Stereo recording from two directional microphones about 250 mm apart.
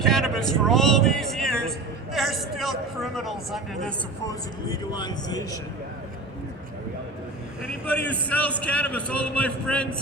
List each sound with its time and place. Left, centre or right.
0.0 s speech: centre
2.1 s a sound: centre
4.7 s speech: centre
8.0 s speech: centre